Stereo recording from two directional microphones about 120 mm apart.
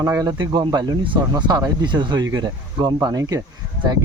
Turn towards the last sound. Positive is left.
turn(degrees=-30)  # may be behind; listen again after turning